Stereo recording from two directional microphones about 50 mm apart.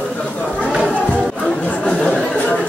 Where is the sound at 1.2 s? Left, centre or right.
Left.